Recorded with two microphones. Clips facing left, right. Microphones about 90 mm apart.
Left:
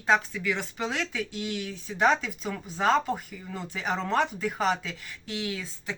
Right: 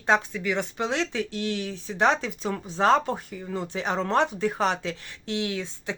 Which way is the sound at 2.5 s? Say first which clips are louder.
Right 3 dB; 45° right (ahead or behind).